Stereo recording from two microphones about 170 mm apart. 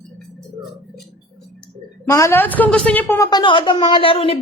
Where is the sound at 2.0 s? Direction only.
15° left (ahead or behind).